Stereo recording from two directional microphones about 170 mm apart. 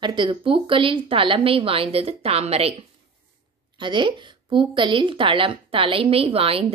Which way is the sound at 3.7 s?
30° right (ahead or behind).